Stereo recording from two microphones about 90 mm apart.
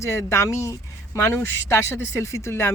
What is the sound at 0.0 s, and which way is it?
A woman's voice, 30° left (ahead or behind).